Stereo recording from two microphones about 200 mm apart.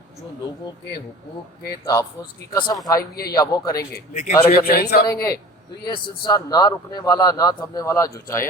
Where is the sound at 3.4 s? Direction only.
20° left (ahead or behind).